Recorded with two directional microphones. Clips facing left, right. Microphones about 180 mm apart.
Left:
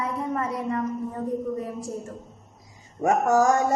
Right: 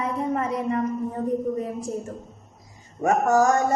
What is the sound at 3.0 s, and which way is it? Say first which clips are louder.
Speech: right 1 dB; 10° left (ahead or behind).